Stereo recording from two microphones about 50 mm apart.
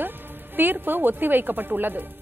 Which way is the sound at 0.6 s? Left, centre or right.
Right.